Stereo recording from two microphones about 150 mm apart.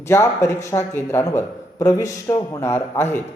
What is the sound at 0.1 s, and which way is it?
A man's voice, 20° left (ahead or behind).